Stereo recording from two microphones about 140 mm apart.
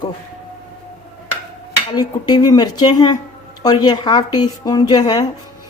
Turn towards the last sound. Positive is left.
turn(degrees=30)  # may be behind; listen again after turning